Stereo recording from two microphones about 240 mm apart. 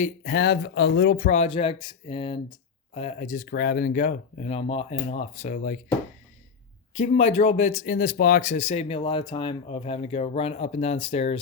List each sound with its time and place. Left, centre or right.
0.0 s speech: left
6.9 s speech: left